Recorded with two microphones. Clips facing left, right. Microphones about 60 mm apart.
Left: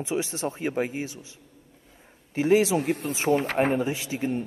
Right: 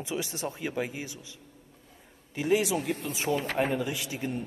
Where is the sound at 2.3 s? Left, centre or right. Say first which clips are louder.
Left 6 dB; left.